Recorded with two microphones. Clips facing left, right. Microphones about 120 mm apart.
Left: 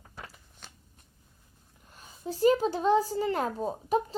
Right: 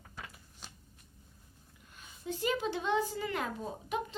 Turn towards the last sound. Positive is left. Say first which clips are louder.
# left 8 dB
turn(degrees=35)  # may be behind; listen again after turning